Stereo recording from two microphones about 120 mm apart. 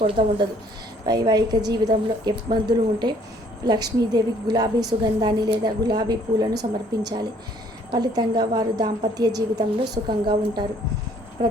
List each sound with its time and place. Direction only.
0.0 s speech: 45° right (ahead or behind)
1.0 s a woman's voice: 35° right (ahead or behind)